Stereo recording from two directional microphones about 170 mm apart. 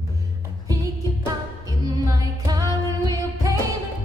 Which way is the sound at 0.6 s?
20° right (ahead or behind).